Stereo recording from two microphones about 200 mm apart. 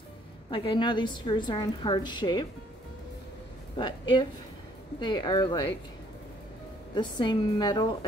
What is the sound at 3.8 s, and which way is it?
Speech, 25° left (ahead or behind).